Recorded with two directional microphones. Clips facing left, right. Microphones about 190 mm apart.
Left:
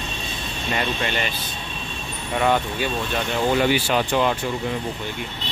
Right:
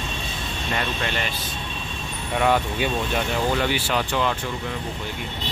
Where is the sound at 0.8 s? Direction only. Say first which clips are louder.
Left 3 dB; centre (ahead or behind).